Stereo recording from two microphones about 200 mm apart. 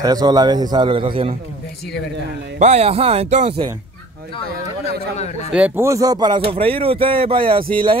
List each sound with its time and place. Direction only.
0.0 s speech: 20° right (ahead or behind)
2.6 s speech: 30° right (ahead or behind)
4.8 s a man's voice: 30° left (ahead or behind)
5.5 s speech: 10° right (ahead or behind); by 7.6 s 25° right (ahead or behind)